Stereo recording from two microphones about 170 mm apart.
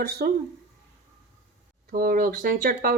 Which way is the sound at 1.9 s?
60° right (ahead or behind).